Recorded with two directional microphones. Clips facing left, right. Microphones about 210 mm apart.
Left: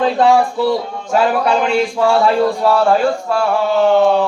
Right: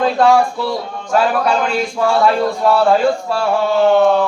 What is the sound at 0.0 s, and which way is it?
Speech, 20° left (ahead or behind).